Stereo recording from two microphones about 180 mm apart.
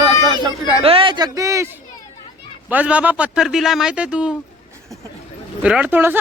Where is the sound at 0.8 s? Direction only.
30° right (ahead or behind); by 4.4 s 5° right (ahead or behind).